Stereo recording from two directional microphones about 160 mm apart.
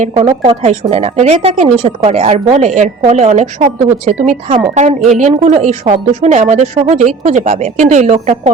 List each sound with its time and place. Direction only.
0.0 s a woman's voice: 40° right (ahead or behind)